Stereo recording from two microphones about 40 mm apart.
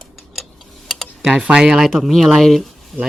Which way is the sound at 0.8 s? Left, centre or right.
Centre.